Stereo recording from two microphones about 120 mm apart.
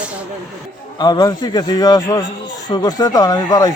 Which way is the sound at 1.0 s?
35° left (ahead or behind).